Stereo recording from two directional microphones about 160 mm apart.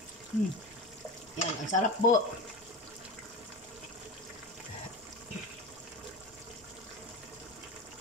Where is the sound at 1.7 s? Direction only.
55° left (ahead or behind).